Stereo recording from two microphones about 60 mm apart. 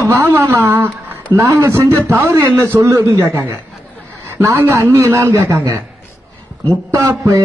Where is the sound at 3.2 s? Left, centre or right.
Right.